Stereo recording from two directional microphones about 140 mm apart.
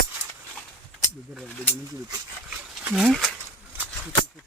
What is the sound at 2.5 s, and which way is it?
Wild animals, 10° right (ahead or behind).